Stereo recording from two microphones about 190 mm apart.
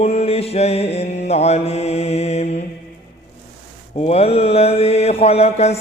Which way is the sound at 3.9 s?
30° left (ahead or behind).